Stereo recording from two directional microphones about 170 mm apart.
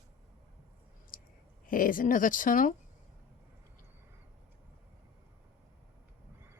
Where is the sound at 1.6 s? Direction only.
55° left (ahead or behind).